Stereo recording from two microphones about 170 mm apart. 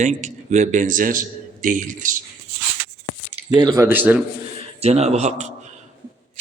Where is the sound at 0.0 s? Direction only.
45° right (ahead or behind).